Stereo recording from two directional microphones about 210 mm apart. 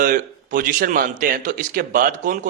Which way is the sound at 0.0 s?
40° right (ahead or behind).